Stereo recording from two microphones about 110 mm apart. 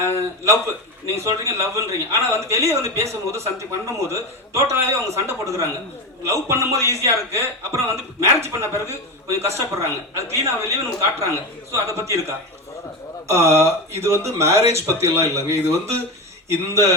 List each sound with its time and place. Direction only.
1.0 s a man's voice: 25° right (ahead or behind)
13.2 s a man's voice: 25° right (ahead or behind)